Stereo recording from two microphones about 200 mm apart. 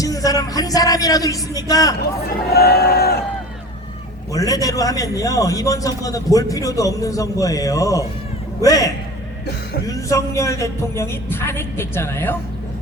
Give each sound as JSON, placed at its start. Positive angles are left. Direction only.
{"t": 0.0, "sound": "a man's voice", "side_deg": 15}
{"t": 2.5, "sound": "speech", "side_deg": 50}
{"t": 4.3, "sound": "a man's voice", "side_deg": 15}